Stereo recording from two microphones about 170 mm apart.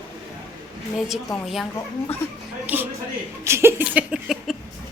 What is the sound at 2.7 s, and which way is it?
Speech, 10° right (ahead or behind).